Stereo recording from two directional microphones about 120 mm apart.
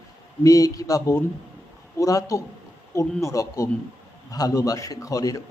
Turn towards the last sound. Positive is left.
turn(degrees=30)  # may be behind; listen again after turning